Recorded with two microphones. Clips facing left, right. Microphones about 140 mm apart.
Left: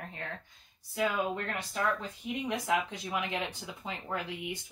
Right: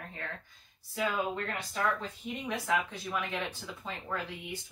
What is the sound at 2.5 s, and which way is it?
Speech, 15° left (ahead or behind).